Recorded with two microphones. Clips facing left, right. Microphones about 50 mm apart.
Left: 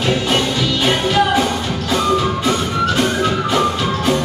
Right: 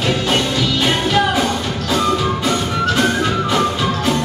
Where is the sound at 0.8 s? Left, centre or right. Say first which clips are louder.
Left 2 dB; centre.